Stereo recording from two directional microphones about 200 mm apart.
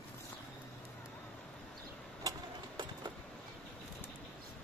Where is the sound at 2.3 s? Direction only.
20° right (ahead or behind).